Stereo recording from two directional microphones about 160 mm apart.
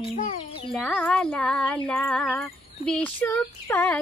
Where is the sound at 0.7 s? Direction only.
5° left (ahead or behind).